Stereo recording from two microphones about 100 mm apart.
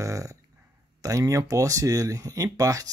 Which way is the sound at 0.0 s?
35° right (ahead or behind).